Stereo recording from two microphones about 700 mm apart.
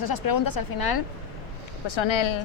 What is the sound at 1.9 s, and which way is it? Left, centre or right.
Speech, left.